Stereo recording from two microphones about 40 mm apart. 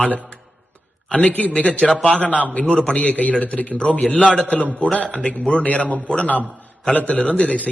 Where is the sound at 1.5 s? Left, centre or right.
Left.